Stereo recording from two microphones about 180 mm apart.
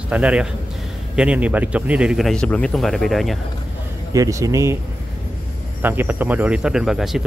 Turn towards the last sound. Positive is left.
turn(degrees=0)  # may be behind; listen again after turning